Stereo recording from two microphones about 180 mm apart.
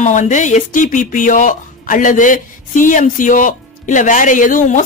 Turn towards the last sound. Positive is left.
turn(degrees=45)  # may be behind; listen again after turning